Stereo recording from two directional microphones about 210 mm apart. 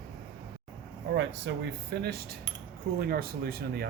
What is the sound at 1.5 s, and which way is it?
Speech, 60° right (ahead or behind).